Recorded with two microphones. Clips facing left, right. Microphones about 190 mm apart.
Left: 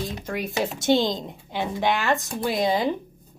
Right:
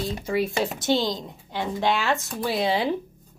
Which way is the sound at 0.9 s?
20° left (ahead or behind).